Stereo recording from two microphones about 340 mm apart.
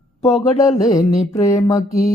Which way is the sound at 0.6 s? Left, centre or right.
Centre.